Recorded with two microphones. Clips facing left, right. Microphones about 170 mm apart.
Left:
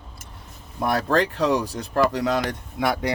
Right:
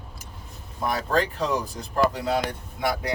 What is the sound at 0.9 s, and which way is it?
Speech, 75° left (ahead or behind).